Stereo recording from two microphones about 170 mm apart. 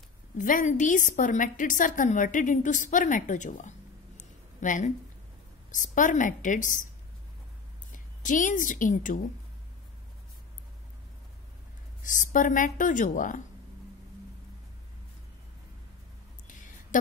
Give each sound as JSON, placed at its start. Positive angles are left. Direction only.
{"t": 0.4, "sound": "a woman's voice", "side_deg": 50}
{"t": 4.2, "sound": "a sound", "side_deg": 45}
{"t": 5.7, "sound": "a woman's voice", "side_deg": 50}
{"t": 7.9, "sound": "a woman's voice", "side_deg": 50}
{"t": 12.0, "sound": "a woman's voice", "side_deg": 50}
{"t": 16.4, "sound": "a sound", "side_deg": 50}